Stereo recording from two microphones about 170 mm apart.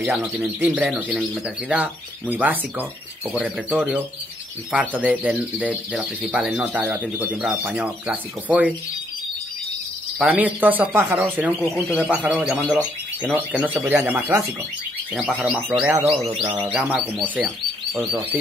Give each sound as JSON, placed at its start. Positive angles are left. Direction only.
{"t": 0.0, "sound": "speech", "side_deg": -5}
{"t": 10.1, "sound": "speech", "side_deg": -10}
{"t": 16.3, "sound": "speech", "side_deg": -30}
{"t": 16.6, "sound": "speech", "side_deg": -10}